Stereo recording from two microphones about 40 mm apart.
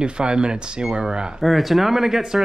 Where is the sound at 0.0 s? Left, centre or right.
Right.